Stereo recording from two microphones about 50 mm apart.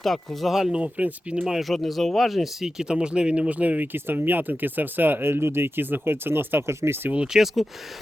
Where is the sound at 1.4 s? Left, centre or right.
Centre; by 3.9 s right.